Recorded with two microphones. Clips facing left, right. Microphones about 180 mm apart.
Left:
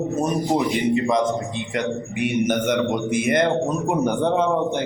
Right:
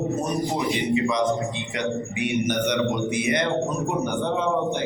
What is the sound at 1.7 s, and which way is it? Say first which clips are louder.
Speech: left 3 dB; 50° left (ahead or behind).